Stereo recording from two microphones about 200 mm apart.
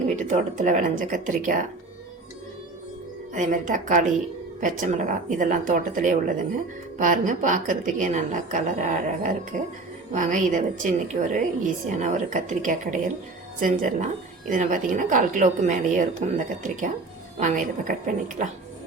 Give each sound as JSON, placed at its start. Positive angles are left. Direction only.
{"t": 0.2, "sound": "a woman's voice", "side_deg": -40}
{"t": 3.3, "sound": "a woman's voice", "side_deg": -40}
{"t": 17.4, "sound": "a woman's voice", "side_deg": -40}